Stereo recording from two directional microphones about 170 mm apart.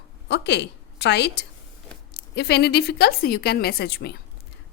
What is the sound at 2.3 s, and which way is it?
A woman's voice, 75° left (ahead or behind).